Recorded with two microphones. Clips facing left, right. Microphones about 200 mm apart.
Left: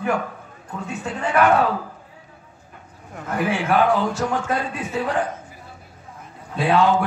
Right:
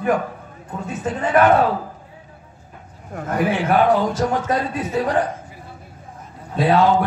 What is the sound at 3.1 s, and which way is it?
Speech, 40° right (ahead or behind).